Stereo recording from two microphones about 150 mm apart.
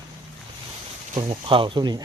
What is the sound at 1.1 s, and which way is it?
Speech, 35° right (ahead or behind).